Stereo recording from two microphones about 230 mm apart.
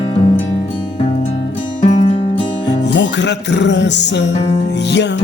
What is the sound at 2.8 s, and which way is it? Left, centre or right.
Music, left.